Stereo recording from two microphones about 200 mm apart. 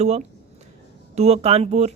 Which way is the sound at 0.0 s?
35° right (ahead or behind).